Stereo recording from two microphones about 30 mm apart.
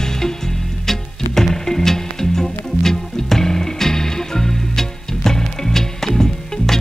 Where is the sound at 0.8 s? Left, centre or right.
Centre.